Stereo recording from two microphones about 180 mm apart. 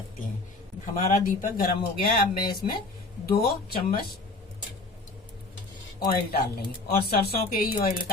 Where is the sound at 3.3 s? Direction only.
55° left (ahead or behind).